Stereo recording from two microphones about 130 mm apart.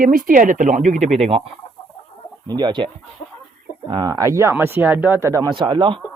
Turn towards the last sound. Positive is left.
turn(degrees=-40)  # may be behind; listen again after turning